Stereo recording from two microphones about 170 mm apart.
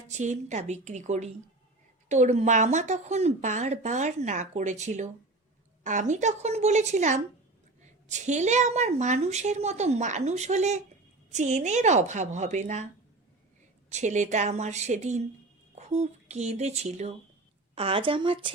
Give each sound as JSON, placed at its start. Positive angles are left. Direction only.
{"t": 0.1, "sound": "speech", "side_deg": -45}
{"t": 13.9, "sound": "speech", "side_deg": -45}